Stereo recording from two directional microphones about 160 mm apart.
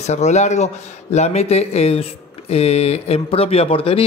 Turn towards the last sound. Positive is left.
turn(degrees=35)  # may be behind; listen again after turning